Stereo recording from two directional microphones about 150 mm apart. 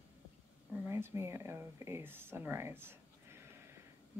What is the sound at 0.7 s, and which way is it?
Speech, 15° right (ahead or behind).